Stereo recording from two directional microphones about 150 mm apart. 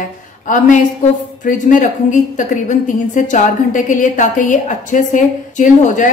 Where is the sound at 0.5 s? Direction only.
60° left (ahead or behind).